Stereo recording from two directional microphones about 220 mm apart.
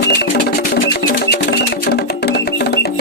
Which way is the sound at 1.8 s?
45° left (ahead or behind).